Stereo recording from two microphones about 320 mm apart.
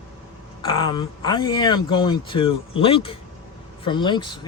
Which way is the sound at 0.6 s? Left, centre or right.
Centre.